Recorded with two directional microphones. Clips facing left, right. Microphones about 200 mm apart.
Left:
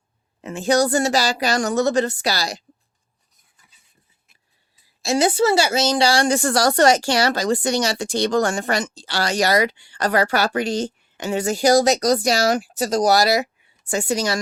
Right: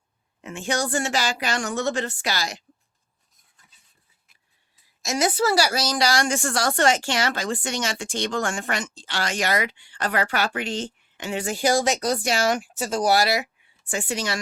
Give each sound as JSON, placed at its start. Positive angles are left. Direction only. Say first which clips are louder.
{"t": 0.4, "sound": "a woman's voice", "louder": "left 8 dB", "side_deg": 35}
{"t": 5.0, "sound": "a woman's voice", "louder": "left 5 dB", "side_deg": 30}